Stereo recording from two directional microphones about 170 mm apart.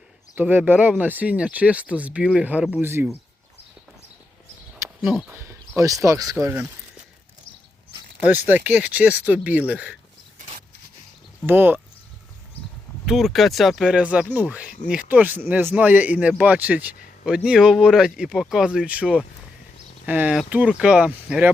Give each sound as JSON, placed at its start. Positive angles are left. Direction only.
{"t": 0.3, "sound": "speech", "side_deg": -10}
{"t": 5.3, "sound": "speech", "side_deg": -15}
{"t": 8.2, "sound": "speech", "side_deg": -10}
{"t": 11.4, "sound": "speech", "side_deg": -10}
{"t": 13.1, "sound": "speech", "side_deg": 0}